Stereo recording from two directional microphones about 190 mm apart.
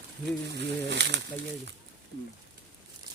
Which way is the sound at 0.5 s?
65° right (ahead or behind).